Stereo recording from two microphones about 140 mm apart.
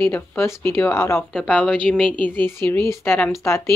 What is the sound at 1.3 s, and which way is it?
A woman's voice, 10° left (ahead or behind).